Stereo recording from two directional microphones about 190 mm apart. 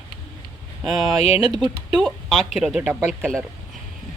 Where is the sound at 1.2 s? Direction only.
35° left (ahead or behind).